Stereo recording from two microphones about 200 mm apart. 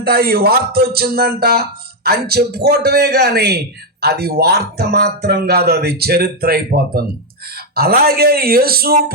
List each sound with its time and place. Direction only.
0.0 s speech: 50° right (ahead or behind)